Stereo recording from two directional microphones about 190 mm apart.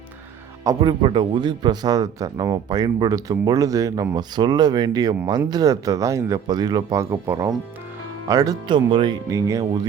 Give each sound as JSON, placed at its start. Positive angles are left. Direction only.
{"t": 0.6, "sound": "a man's voice", "side_deg": -20}